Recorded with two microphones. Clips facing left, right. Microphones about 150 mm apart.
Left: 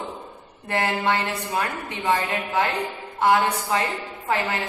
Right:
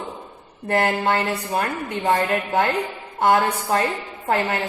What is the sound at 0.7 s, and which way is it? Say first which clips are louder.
A woman's voice: right 3 dB; 50° right (ahead or behind).